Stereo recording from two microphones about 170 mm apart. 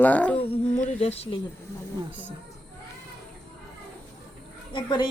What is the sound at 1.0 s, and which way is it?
Speech, 35° left (ahead or behind).